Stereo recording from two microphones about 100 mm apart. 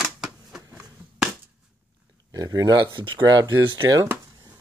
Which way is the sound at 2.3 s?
35° right (ahead or behind).